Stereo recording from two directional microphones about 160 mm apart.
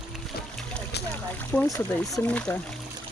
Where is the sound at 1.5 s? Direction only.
10° left (ahead or behind).